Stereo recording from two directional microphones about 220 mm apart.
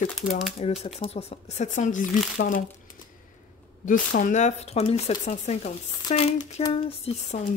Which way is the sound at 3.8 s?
35° left (ahead or behind).